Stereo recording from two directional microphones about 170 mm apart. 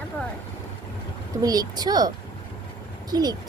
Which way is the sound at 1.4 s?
20° right (ahead or behind).